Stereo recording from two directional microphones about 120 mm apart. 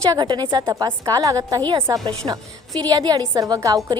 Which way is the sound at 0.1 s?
35° right (ahead or behind).